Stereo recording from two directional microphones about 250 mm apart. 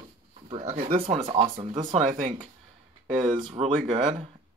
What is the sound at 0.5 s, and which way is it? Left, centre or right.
Speech, right.